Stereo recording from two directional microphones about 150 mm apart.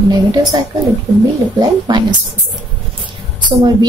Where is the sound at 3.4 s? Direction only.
30° right (ahead or behind).